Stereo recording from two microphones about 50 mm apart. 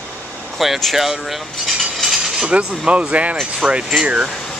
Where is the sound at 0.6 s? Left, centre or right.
Centre.